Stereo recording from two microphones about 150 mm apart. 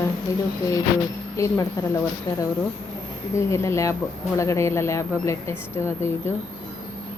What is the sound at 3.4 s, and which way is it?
A woman's voice, 20° left (ahead or behind).